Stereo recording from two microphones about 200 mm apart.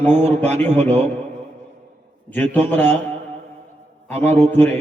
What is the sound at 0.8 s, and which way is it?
Speech, 35° right (ahead or behind).